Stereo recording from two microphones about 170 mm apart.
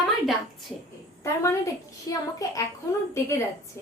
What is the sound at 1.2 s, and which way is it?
A woman's voice, 15° left (ahead or behind).